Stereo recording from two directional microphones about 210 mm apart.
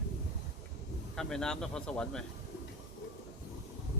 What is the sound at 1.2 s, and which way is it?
Speech, 5° left (ahead or behind).